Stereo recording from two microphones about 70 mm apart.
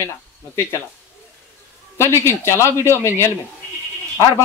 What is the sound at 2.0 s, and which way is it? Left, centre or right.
Speech, left.